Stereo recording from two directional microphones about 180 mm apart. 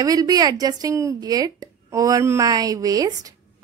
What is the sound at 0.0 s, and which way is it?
Speech, 20° right (ahead or behind).